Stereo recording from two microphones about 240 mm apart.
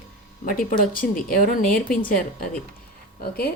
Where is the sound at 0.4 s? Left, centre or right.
Left.